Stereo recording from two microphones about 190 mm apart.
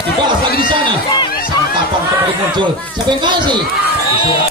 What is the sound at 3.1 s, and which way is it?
Speech, 25° right (ahead or behind).